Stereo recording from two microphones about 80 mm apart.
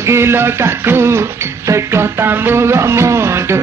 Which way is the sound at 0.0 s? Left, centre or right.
Right.